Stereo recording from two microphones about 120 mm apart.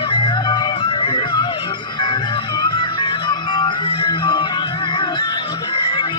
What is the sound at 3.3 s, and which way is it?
Music, 40° left (ahead or behind).